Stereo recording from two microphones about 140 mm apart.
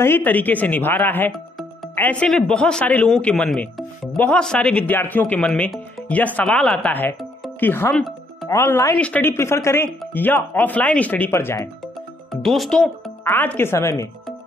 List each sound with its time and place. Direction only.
0.0 s speech: 15° left (ahead or behind)
7.9 s music: centre (ahead or behind)
8.5 s speech: 20° left (ahead or behind)
12.3 s speech: centre (ahead or behind)
13.2 s speech: 15° left (ahead or behind)